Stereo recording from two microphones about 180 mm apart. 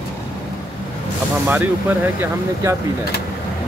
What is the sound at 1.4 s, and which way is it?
Speech, 10° right (ahead or behind).